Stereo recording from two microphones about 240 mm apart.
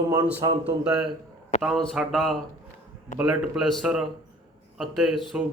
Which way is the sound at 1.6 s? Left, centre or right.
Centre.